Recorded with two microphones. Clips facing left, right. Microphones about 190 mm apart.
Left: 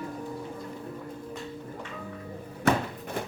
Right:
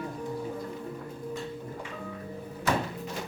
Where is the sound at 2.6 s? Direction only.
55° left (ahead or behind).